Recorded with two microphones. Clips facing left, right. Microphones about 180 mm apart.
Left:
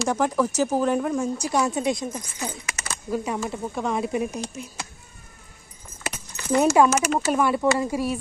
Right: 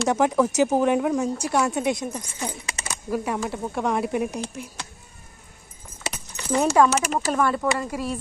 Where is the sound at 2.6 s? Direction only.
30° right (ahead or behind).